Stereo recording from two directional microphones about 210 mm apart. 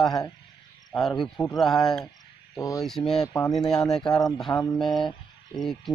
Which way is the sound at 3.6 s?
15° left (ahead or behind).